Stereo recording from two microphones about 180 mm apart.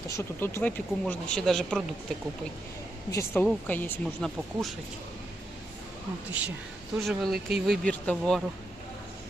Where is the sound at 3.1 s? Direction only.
15° left (ahead or behind).